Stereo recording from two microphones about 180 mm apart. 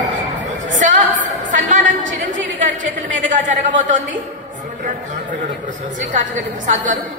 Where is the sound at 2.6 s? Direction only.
45° right (ahead or behind).